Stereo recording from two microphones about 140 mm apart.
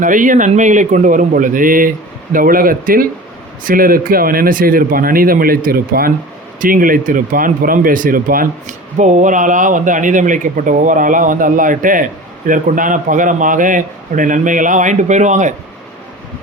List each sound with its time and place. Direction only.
0.0 s a man's voice: 70° right (ahead or behind)